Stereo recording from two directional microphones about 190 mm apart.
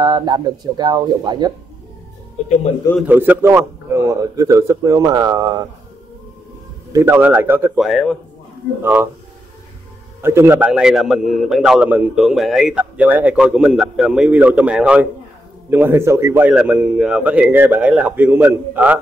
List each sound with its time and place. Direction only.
0.0 s speech: 20° right (ahead or behind)
3.0 s a man's voice: 10° right (ahead or behind)
6.9 s a man's voice: 15° right (ahead or behind)
8.8 s a man's voice: 10° right (ahead or behind)
10.2 s a man's voice: 15° right (ahead or behind)